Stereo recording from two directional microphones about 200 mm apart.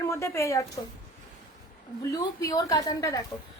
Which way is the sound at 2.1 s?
15° left (ahead or behind).